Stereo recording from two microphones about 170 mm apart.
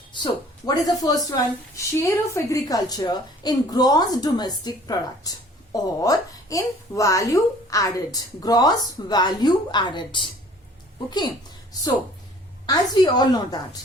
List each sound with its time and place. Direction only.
0.1 s speech: 25° left (ahead or behind)
12.6 s speech: 25° left (ahead or behind)